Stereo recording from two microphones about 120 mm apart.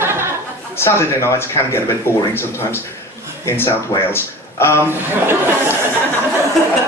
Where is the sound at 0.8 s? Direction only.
20° left (ahead or behind).